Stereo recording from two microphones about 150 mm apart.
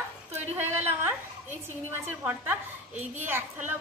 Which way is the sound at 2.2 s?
10° right (ahead or behind).